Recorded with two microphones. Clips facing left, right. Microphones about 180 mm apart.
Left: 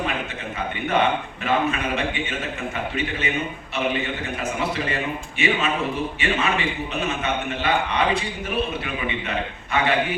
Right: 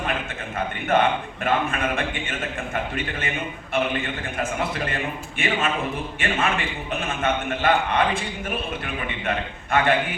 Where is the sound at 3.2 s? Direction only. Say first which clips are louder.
Left 2 dB; 50° right (ahead or behind).